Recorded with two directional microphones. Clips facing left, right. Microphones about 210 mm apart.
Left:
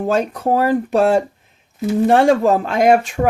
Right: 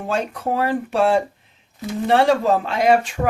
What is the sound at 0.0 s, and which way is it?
Speech, 40° left (ahead or behind).